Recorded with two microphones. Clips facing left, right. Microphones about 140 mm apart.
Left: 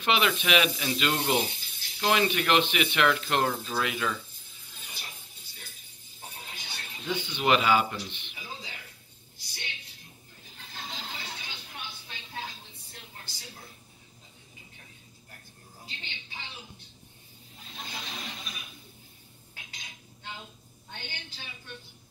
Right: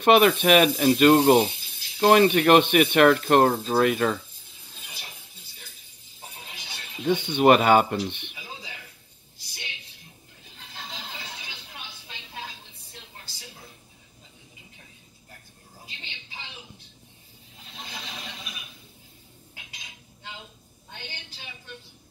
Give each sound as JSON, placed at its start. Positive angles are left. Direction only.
{"t": 0.0, "sound": "speech", "side_deg": -50}
{"t": 7.1, "sound": "speech", "side_deg": -55}